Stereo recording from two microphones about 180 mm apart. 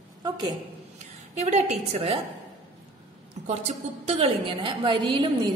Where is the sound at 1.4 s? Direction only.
40° right (ahead or behind).